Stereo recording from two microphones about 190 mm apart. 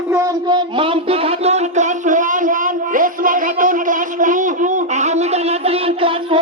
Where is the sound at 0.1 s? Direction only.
20° right (ahead or behind).